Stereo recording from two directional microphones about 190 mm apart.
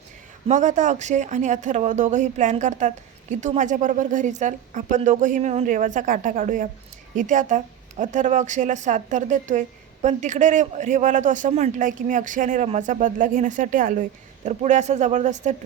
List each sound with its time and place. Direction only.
0.4 s a woman's voice: 40° right (ahead or behind)